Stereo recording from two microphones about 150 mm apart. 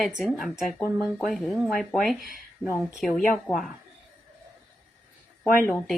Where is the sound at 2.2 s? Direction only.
75° right (ahead or behind).